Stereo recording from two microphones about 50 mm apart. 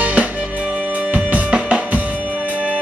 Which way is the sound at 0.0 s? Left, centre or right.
Right.